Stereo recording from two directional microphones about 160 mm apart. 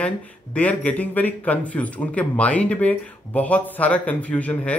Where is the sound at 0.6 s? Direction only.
10° left (ahead or behind).